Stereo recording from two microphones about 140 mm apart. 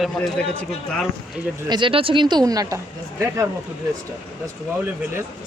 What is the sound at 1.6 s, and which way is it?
Speech, 35° right (ahead or behind).